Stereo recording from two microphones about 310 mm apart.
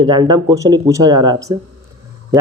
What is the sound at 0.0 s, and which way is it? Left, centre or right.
Speech, centre.